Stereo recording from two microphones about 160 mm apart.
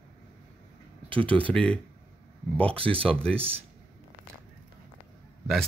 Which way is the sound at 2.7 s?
35° right (ahead or behind).